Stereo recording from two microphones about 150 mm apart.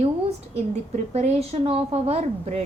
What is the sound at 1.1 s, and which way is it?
A woman's voice, 45° right (ahead or behind).